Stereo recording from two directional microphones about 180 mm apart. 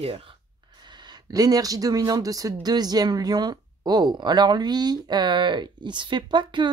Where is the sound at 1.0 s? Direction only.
20° right (ahead or behind).